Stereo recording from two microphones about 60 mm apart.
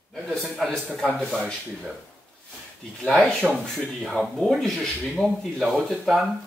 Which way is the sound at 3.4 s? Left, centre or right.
Centre.